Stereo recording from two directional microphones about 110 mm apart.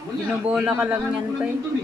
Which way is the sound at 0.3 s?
10° right (ahead or behind).